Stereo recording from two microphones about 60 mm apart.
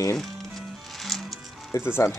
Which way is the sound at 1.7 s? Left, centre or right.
Left.